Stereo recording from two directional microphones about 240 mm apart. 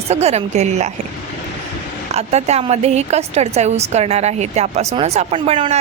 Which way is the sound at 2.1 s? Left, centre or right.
Right.